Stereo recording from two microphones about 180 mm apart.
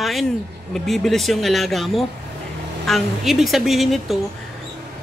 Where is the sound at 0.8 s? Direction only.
Centre (ahead or behind).